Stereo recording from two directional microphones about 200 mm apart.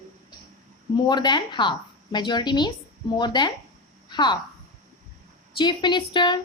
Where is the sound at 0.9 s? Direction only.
20° left (ahead or behind).